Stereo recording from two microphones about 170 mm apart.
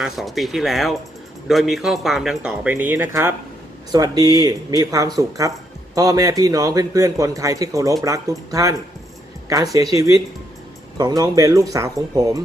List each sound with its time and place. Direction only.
0.0 s speech: centre (ahead or behind); by 8.7 s 20° right (ahead or behind)
9.7 s speech: 20° right (ahead or behind)